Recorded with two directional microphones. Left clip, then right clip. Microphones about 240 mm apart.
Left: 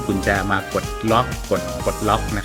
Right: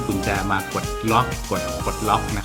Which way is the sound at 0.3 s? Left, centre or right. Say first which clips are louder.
Left 5 dB; centre.